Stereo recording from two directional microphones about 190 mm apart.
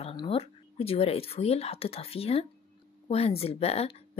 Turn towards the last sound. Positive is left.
turn(degrees=30)  # may be behind; listen again after turning